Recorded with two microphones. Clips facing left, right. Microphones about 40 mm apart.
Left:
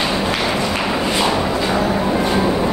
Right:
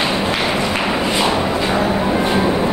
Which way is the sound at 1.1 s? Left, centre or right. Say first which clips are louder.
Even; centre.